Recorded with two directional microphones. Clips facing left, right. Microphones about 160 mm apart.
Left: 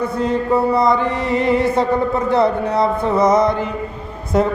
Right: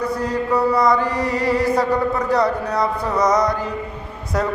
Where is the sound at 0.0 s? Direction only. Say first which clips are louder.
Left 3 dB; 25° left (ahead or behind).